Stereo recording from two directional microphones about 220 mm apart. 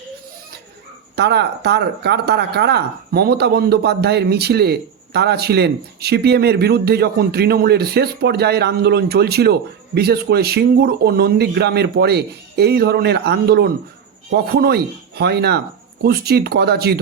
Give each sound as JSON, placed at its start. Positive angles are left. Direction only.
{"t": 1.1, "sound": "speech", "side_deg": -50}